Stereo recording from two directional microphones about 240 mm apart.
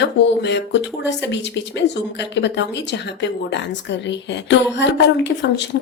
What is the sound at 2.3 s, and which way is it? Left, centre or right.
A woman's voice, left.